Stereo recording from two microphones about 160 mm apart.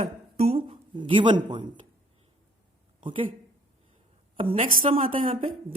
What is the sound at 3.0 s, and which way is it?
Speech, 35° right (ahead or behind).